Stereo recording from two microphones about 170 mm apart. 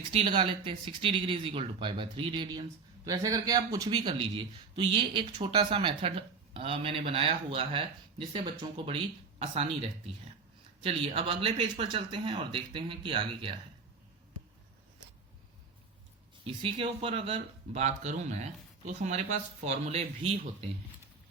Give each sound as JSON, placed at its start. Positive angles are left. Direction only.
{"t": 0.1, "sound": "speech", "side_deg": -30}
{"t": 16.4, "sound": "speech", "side_deg": -30}